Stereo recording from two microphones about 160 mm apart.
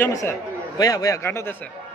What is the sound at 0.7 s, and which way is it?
Speech, 20° left (ahead or behind).